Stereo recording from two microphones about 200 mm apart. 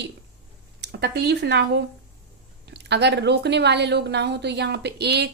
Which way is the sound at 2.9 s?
60° right (ahead or behind).